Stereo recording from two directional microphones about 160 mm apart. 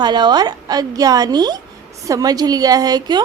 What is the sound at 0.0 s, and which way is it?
A woman's voice, 25° right (ahead or behind).